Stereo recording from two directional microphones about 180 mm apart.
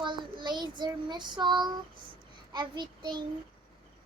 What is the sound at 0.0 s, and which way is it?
Child singing, 25° right (ahead or behind).